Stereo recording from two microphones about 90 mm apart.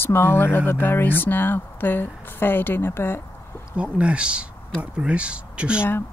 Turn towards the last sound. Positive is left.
turn(degrees=-10)  # may be behind; listen again after turning